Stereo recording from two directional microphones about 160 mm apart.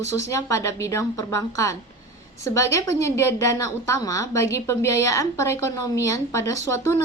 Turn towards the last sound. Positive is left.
turn(degrees=20)  # may be behind; listen again after turning